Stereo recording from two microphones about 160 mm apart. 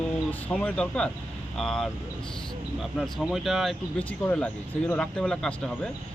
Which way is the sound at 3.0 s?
Centre (ahead or behind).